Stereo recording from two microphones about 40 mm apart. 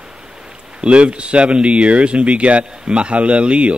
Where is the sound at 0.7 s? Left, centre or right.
Right.